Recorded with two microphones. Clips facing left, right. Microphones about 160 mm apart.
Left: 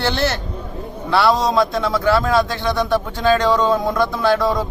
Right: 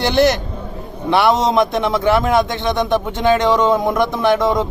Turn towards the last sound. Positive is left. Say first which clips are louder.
# right 2 dB
turn(degrees=-20)  # may be behind; listen again after turning